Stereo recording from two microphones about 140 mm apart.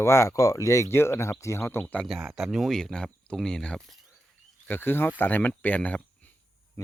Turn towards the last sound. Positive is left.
turn(degrees=10)  # may be behind; listen again after turning